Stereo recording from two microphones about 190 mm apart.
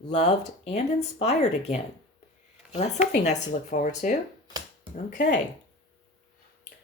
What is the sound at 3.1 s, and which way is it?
Speech, 40° left (ahead or behind).